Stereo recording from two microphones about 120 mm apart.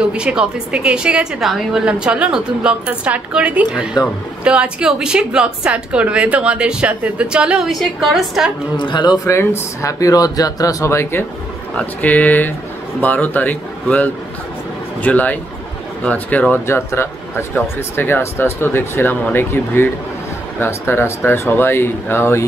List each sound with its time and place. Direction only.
0.1 s a woman's voice: 10° right (ahead or behind)
8.7 s a man's voice: 40° left (ahead or behind)
9.2 s speech: 20° left (ahead or behind)